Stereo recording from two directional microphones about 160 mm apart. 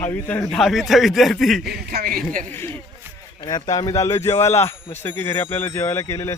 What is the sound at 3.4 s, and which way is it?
Speech, 25° left (ahead or behind).